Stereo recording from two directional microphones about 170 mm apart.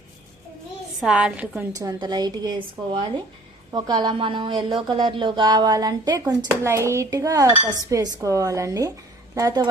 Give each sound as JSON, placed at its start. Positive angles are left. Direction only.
{"t": 0.9, "sound": "a woman's voice", "side_deg": -5}
{"t": 1.7, "sound": "dishes", "side_deg": -20}